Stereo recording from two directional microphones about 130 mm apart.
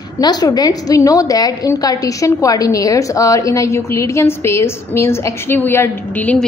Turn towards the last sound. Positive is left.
turn(degrees=10)  # may be behind; listen again after turning